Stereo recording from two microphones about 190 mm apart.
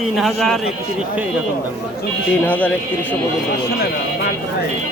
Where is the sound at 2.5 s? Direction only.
10° left (ahead or behind).